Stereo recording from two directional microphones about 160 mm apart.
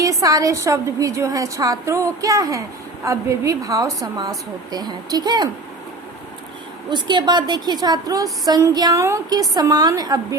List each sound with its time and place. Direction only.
0.0 s a woman's voice: 20° right (ahead or behind)
6.9 s a woman's voice: 25° right (ahead or behind)